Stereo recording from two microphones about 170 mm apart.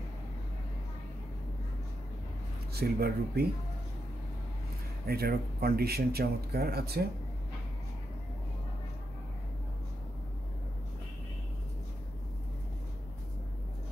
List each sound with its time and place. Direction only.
2.7 s speech: 65° right (ahead or behind)
5.0 s speech: 65° right (ahead or behind)